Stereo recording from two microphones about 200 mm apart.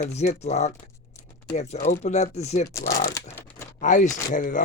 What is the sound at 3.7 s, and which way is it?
Speech, 40° left (ahead or behind).